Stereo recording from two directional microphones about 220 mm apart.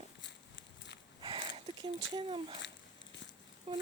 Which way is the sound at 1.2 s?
25° right (ahead or behind).